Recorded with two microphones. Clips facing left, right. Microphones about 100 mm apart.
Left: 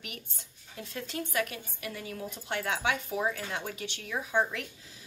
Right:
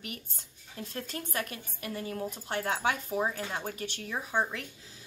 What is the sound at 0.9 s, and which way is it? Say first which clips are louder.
A woman's voice: left 4 dB; 45° right (ahead or behind).